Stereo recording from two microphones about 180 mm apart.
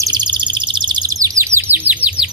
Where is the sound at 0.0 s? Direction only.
25° right (ahead or behind).